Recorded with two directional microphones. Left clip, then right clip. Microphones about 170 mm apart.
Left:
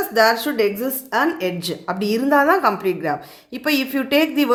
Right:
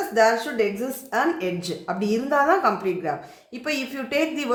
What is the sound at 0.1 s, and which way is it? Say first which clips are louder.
Speech: left 3 dB; 40° left (ahead or behind).